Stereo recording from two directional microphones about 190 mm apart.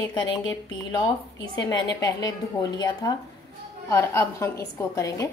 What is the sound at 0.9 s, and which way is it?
A woman's voice, 20° left (ahead or behind).